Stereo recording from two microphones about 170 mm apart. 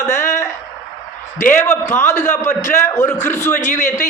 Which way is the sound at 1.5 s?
15° left (ahead or behind).